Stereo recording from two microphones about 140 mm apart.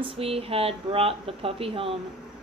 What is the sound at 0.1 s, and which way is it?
Speech, 45° right (ahead or behind).